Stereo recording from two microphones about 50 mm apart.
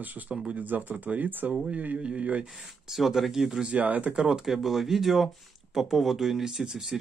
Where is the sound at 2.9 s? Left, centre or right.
Centre.